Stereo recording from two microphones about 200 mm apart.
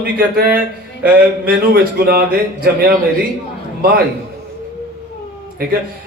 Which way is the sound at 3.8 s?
50° right (ahead or behind).